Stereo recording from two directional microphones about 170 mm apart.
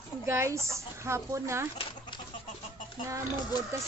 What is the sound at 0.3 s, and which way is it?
A woman's voice, 15° right (ahead or behind).